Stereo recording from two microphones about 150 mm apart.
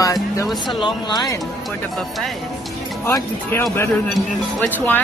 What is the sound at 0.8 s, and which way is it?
Speech, 30° left (ahead or behind).